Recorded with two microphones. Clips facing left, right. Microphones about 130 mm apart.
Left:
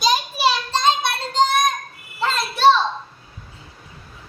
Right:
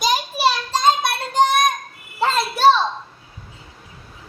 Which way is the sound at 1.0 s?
55° right (ahead or behind).